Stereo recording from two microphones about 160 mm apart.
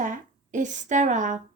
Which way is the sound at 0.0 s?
50° right (ahead or behind).